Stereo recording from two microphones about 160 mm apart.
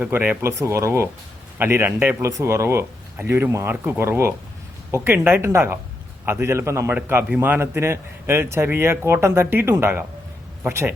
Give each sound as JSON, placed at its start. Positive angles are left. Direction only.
{"t": 0.0, "sound": "a man's voice", "side_deg": -10}